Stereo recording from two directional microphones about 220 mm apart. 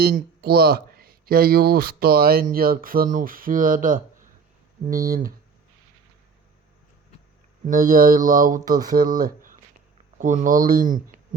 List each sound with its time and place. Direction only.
0.0 s speech: 45° right (ahead or behind)
7.7 s speech: 40° right (ahead or behind)